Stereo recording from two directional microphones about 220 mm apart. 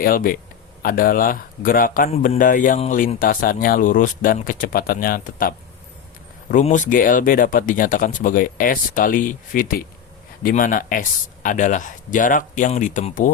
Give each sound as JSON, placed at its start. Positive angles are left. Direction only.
{"t": 0.0, "sound": "speech", "side_deg": 40}